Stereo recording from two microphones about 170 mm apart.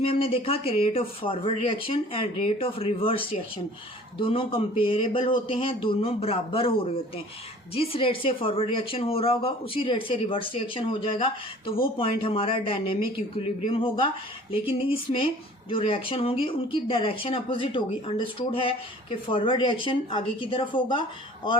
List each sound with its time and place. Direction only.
0.0 s speech: 35° left (ahead or behind)